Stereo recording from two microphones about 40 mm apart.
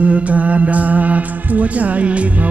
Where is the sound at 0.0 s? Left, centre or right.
Right.